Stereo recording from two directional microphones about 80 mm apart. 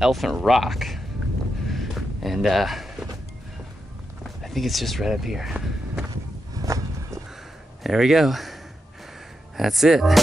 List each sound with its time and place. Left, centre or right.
0.0 s speech: centre
1.7 s a sound: centre
4.4 s speech: centre
6.5 s walk: right
7.8 s speech: centre
9.6 s speech: centre